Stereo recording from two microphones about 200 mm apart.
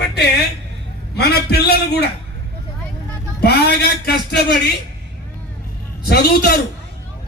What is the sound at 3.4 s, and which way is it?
A man's voice, 55° left (ahead or behind).